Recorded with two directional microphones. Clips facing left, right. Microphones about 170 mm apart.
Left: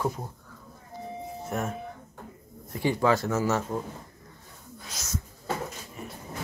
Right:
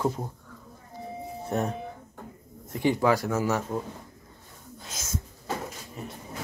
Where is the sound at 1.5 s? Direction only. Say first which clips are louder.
Right 3 dB; 35° right (ahead or behind).